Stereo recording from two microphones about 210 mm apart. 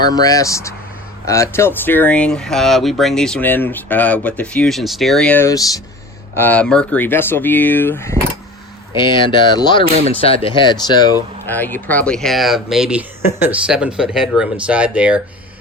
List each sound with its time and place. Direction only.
0.0 s speech: 15° left (ahead or behind)
9.0 s speech: 20° left (ahead or behind); by 15.2 s 5° right (ahead or behind)